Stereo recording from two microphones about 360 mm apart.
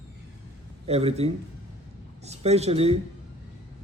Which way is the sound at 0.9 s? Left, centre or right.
Centre.